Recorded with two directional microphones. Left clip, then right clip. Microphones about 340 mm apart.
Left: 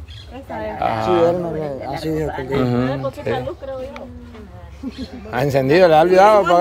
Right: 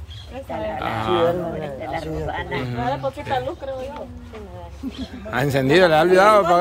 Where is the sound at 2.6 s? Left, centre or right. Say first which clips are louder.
Left 7 dB; centre.